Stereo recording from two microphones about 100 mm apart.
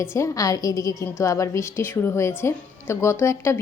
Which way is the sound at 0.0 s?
30° left (ahead or behind).